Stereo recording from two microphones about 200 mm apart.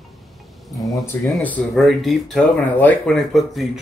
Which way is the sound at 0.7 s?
Centre (ahead or behind).